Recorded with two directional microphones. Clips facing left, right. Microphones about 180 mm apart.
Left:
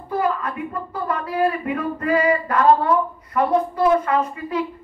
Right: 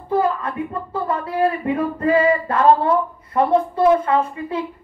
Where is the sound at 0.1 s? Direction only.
30° right (ahead or behind).